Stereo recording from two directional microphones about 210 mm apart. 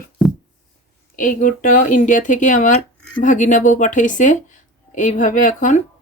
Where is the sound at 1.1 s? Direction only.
40° left (ahead or behind).